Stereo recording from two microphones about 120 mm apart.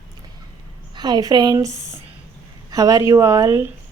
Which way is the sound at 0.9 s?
35° right (ahead or behind).